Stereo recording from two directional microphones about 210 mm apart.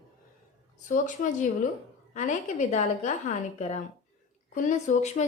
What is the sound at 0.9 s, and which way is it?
A woman's voice, 35° left (ahead or behind).